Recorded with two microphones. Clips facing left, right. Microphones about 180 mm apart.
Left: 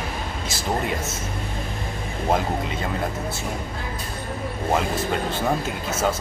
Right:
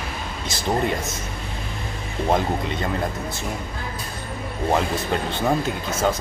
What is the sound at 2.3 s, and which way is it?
Speech, 5° left (ahead or behind).